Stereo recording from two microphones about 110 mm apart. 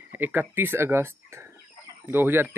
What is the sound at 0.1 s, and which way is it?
Speech, 20° right (ahead or behind).